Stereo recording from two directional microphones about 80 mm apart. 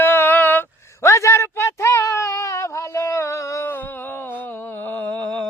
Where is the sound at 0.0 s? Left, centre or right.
Left.